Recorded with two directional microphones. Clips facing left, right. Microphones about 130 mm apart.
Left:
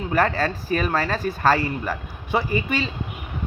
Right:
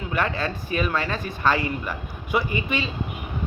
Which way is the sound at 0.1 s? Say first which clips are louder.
Left 4 dB; 40° left (ahead or behind).